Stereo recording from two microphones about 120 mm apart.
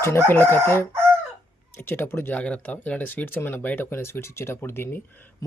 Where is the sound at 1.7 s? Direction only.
20° left (ahead or behind).